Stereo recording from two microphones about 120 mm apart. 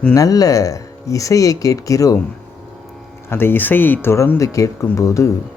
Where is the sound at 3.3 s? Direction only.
15° left (ahead or behind).